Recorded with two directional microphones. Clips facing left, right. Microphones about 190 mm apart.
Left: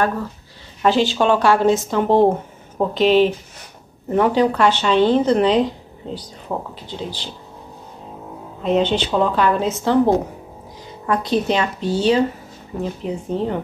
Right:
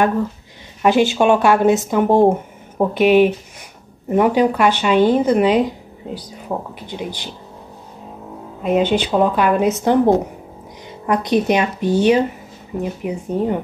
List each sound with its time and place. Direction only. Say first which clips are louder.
0.8 s speech: right 2 dB; 15° right (ahead or behind)
8.6 s speech: right 1 dB; 10° right (ahead or behind)